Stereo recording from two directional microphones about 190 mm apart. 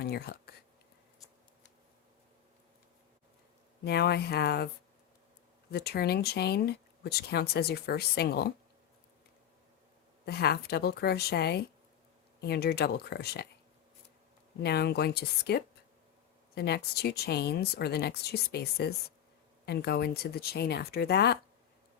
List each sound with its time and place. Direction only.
0.0 s speech: 55° left (ahead or behind)
3.8 s speech: 60° left (ahead or behind)
5.7 s speech: 55° left (ahead or behind)
10.2 s speech: 55° left (ahead or behind)
14.6 s speech: 60° left (ahead or behind)